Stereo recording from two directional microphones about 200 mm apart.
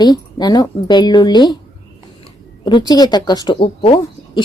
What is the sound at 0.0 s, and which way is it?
Speech, 20° left (ahead or behind).